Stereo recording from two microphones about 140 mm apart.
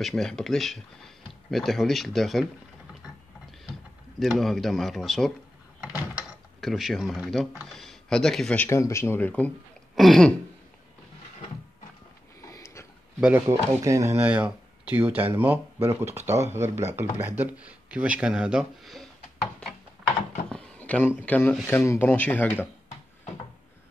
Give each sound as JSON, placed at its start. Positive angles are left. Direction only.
{"t": 0.0, "sound": "speech", "side_deg": 5}
{"t": 4.2, "sound": "speech", "side_deg": 0}
{"t": 6.1, "sound": "mechanisms", "side_deg": 0}
{"t": 7.6, "sound": "speech", "side_deg": 0}
{"t": 8.6, "sound": "speech", "side_deg": 20}
{"t": 12.4, "sound": "a sound", "side_deg": 20}
{"t": 13.2, "sound": "speech", "side_deg": -15}
{"t": 20.4, "sound": "drawer open or close", "side_deg": 5}
{"t": 21.2, "sound": "speech", "side_deg": 10}